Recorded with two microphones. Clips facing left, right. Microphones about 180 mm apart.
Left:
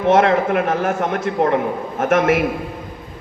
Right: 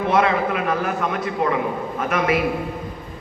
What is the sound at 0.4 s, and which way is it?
A man's voice, 45° left (ahead or behind).